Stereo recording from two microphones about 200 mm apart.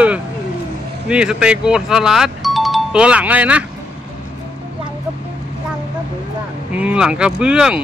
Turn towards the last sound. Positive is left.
turn(degrees=-5)  # may be behind; listen again after turning